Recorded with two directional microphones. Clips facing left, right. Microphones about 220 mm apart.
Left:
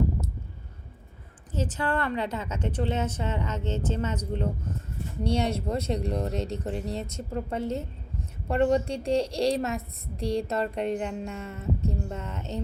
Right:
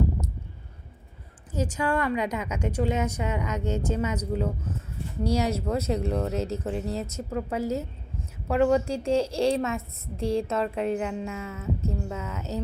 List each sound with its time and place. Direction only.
1.5 s a woman's voice: 10° right (ahead or behind)
5.2 s speech: 30° left (ahead or behind)
5.7 s a woman's voice: 5° right (ahead or behind)